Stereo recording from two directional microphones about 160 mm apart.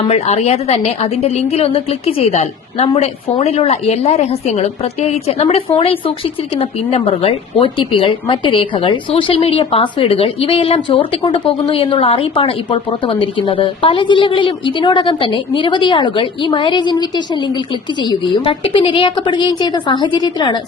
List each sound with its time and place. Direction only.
0.1 s a woman's voice: 40° left (ahead or behind)